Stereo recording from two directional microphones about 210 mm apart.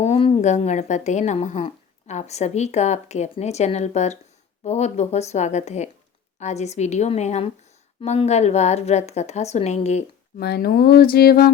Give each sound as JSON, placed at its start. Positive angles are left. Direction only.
{"t": 0.0, "sound": "speech", "side_deg": 30}
{"t": 10.4, "sound": "speech", "side_deg": 50}